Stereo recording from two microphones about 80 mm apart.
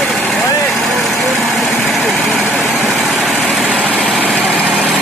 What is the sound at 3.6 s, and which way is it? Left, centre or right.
Vehicle, right.